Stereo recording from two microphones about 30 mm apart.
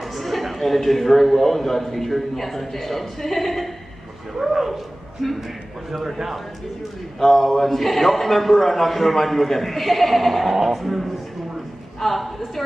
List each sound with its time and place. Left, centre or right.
0.0 s a sound: centre
0.6 s a man's voice: centre
4.4 s speech: centre
5.2 s a man's voice: centre
6.0 s speech: centre
7.2 s a man's voice: centre